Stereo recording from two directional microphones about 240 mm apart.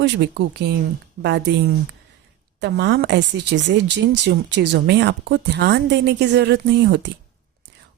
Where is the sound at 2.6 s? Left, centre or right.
Right.